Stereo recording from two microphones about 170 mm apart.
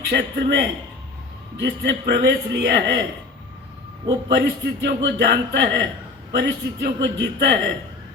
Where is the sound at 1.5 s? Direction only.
90° right.